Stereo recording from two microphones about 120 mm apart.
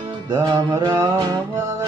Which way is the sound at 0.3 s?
30° right (ahead or behind).